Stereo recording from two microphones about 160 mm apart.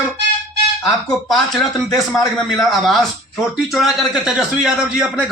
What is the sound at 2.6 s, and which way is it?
A man's voice, centre (ahead or behind).